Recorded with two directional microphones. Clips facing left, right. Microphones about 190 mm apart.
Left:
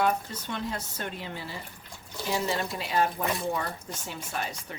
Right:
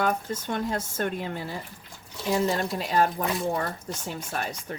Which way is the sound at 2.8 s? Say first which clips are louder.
Right 3 dB; 45° right (ahead or behind).